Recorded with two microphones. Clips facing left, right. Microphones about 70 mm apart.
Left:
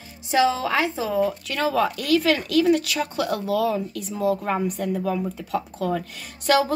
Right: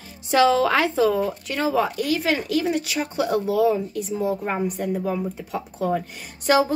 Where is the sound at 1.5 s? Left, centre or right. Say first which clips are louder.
Right 3 dB; right.